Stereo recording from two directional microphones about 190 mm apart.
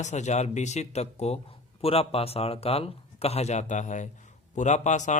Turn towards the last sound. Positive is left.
turn(degrees=40)  # may be behind; listen again after turning